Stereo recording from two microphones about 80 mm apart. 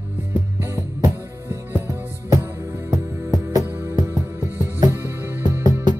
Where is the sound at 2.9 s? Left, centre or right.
Right.